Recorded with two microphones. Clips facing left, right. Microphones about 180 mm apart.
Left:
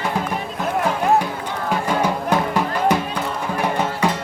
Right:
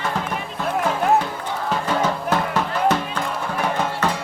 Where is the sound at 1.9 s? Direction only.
15° left (ahead or behind).